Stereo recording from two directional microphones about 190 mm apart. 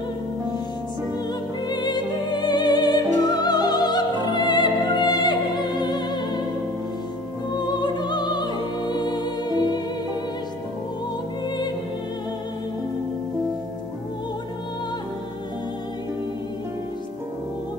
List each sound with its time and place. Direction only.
1.7 s music: 20° left (ahead or behind)
7.5 s music: 20° left (ahead or behind)